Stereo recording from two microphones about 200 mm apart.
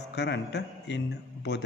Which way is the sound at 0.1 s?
60° left (ahead or behind).